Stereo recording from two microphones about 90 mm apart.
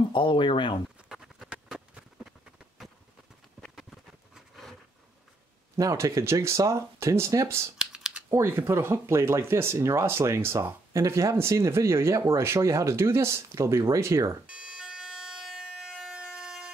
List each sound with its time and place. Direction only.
0.1 s speech: 60° left (ahead or behind)
1.0 s a sound: 5° right (ahead or behind)
5.8 s speech: 35° right (ahead or behind)
7.8 s typing: 10° right (ahead or behind)
8.3 s speech: 30° right (ahead or behind)
14.4 s emergency vehicle: 10° right (ahead or behind)